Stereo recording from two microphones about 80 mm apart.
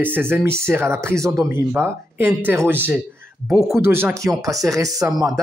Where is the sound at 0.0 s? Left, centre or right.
Right.